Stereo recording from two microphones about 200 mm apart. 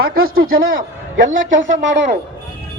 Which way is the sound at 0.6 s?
80° right.